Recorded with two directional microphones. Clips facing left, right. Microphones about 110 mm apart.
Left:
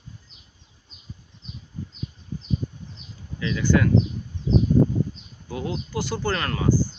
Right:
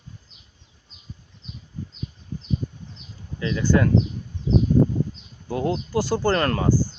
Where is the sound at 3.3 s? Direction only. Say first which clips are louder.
Right 1 dB; 35° right (ahead or behind).